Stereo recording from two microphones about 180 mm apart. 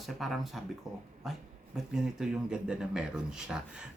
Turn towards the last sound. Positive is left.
turn(degrees=-5)  # may be behind; listen again after turning